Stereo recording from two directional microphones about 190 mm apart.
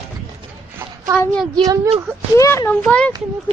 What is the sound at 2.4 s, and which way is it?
Speech, 15° left (ahead or behind).